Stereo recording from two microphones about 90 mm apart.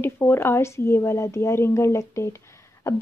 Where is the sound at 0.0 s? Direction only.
25° left (ahead or behind).